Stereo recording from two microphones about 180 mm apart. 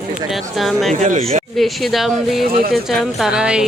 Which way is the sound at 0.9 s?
45° right (ahead or behind).